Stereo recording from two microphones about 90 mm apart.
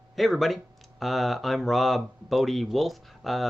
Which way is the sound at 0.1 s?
Centre (ahead or behind).